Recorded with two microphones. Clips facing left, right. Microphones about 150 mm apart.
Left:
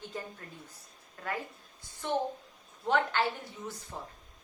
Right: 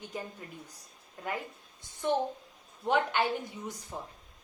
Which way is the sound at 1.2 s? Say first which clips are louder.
Right 1 dB; 20° right (ahead or behind).